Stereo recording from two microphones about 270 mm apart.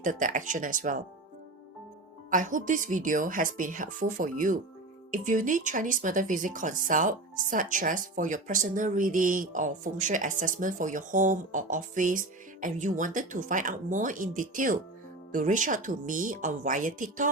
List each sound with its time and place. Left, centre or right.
0.0 s speech: right
2.3 s speech: right